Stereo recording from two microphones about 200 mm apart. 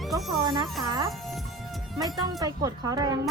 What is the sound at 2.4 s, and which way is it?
Speech, 20° right (ahead or behind).